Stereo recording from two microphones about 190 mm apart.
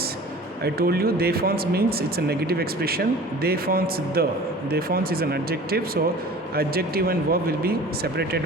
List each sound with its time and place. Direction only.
0.6 s speech: 55° right (ahead or behind)